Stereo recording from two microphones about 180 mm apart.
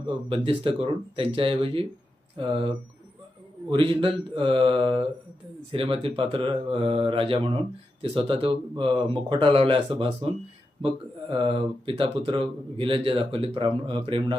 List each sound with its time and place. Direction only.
0.3 s speech: 30° right (ahead or behind)